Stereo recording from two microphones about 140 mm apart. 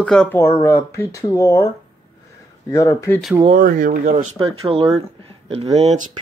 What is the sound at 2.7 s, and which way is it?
Speech, 25° left (ahead or behind).